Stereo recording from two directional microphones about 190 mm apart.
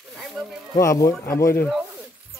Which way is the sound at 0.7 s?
15° left (ahead or behind).